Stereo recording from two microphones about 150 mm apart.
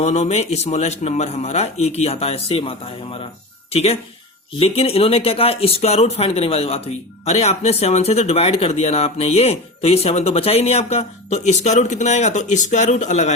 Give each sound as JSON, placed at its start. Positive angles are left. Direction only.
{"t": 0.0, "sound": "speech", "side_deg": 45}